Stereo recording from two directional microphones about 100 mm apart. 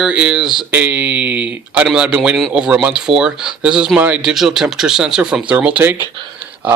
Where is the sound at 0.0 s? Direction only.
10° right (ahead or behind).